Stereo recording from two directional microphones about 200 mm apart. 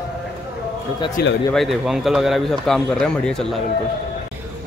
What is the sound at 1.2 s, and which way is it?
Speech, 50° left (ahead or behind).